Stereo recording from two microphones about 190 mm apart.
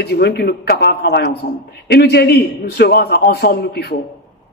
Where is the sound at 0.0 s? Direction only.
60° left (ahead or behind).